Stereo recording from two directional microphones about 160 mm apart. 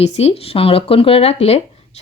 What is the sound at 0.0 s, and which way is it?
Speech, 40° left (ahead or behind).